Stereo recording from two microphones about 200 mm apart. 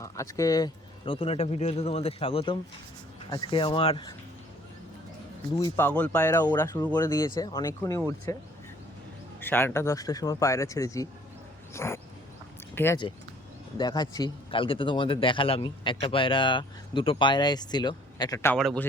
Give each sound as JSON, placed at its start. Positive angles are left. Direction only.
{"t": 0.0, "sound": "speech", "side_deg": 15}
{"t": 5.5, "sound": "speech", "side_deg": 15}
{"t": 9.4, "sound": "speech", "side_deg": 10}
{"t": 18.3, "sound": "speech", "side_deg": 5}